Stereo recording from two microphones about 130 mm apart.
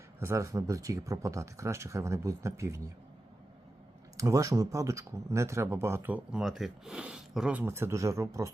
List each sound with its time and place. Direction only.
0.2 s speech: 20° right (ahead or behind)
4.2 s speech: 25° right (ahead or behind)